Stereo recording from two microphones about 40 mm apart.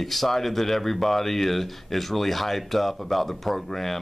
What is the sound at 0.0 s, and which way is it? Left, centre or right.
Speech, centre.